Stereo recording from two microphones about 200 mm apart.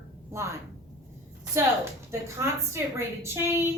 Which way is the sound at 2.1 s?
15° right (ahead or behind).